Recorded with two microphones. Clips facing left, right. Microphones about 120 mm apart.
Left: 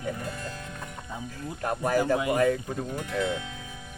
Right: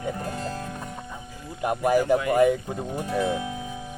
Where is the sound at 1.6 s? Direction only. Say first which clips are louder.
Right 4 dB; 15° right (ahead or behind).